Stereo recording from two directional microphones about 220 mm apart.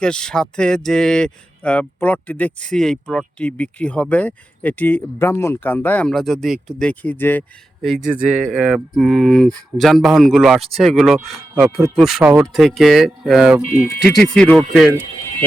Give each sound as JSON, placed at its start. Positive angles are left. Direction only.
{"t": 0.0, "sound": "speech", "side_deg": 5}
{"t": 8.0, "sound": "speech", "side_deg": -35}
{"t": 8.5, "sound": "speech", "side_deg": 0}